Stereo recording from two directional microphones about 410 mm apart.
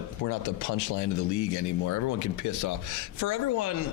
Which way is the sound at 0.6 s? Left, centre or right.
Left.